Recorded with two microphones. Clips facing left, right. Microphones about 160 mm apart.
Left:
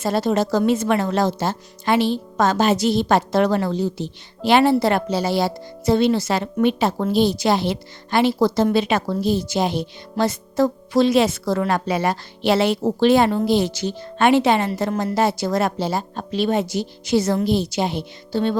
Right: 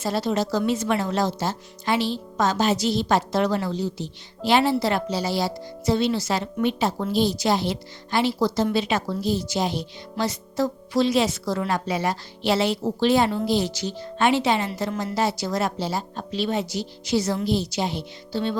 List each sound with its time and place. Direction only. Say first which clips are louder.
0.0 s a woman's voice: left 4 dB; 50° left (ahead or behind)